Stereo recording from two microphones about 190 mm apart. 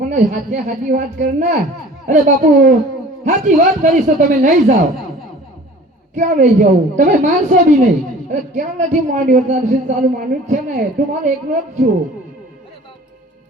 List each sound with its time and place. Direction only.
0.0 s a man's voice: 40° right (ahead or behind)
6.1 s a woman's voice: 40° right (ahead or behind)